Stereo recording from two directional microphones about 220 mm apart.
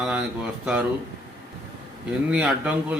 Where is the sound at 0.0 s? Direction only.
5° right (ahead or behind).